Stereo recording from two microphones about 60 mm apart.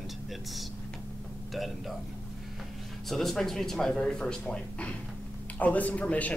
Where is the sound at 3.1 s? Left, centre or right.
Centre.